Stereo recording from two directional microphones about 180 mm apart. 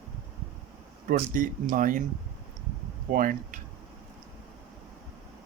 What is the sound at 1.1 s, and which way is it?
Speech, 45° right (ahead or behind).